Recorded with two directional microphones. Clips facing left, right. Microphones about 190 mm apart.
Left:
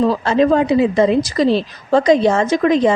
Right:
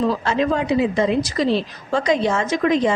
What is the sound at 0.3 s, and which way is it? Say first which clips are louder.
Speech: left 6 dB; 35° left (ahead or behind).